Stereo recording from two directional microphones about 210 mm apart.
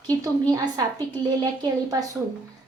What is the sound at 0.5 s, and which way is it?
Speech, 15° right (ahead or behind).